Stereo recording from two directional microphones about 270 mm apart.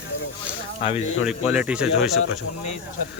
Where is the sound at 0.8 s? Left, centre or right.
Centre.